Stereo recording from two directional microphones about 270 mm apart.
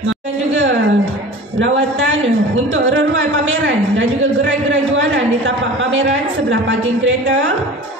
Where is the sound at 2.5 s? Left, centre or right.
Right.